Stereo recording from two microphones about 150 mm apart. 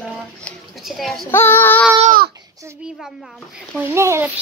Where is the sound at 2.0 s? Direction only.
80° right.